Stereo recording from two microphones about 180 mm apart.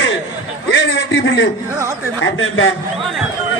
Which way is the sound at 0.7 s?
90° left.